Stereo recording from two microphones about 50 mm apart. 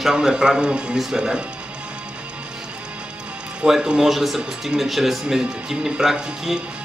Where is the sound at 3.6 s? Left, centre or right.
Centre.